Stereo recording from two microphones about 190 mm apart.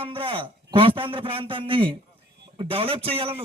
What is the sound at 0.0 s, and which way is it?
A man's voice, 25° right (ahead or behind).